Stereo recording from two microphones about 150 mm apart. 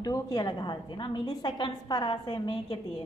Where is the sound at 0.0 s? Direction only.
25° left (ahead or behind).